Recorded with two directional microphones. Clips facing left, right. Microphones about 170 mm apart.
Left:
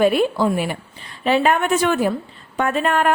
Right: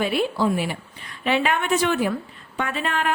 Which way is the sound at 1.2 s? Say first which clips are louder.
Left 5 dB; 40° left (ahead or behind).